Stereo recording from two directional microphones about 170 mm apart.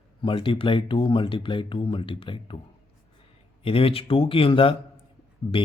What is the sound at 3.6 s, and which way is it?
Speech, 35° left (ahead or behind).